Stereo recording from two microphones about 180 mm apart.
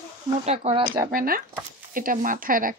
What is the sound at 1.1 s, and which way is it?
A woman's voice, 50° right (ahead or behind).